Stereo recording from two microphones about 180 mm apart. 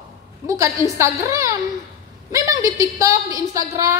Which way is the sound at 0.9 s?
15° right (ahead or behind).